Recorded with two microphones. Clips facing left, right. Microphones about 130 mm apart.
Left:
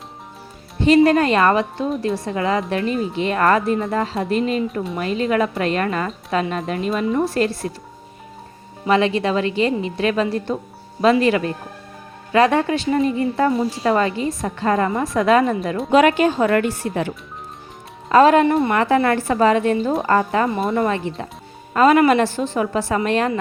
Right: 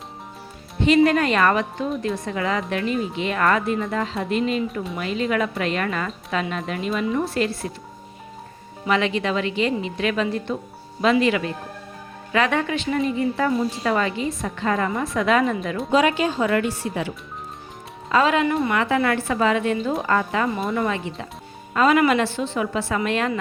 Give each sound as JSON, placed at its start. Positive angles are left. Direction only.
{"t": 0.9, "sound": "a woman's voice", "side_deg": 35}
{"t": 8.9, "sound": "a woman's voice", "side_deg": 35}
{"t": 15.9, "sound": "speech", "side_deg": 60}
{"t": 18.1, "sound": "a woman's voice", "side_deg": 45}